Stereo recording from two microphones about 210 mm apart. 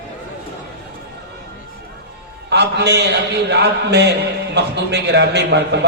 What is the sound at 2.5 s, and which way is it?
A man's voice, 55° right (ahead or behind).